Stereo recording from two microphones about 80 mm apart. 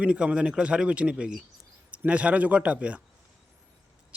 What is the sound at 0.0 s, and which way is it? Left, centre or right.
Speech, centre.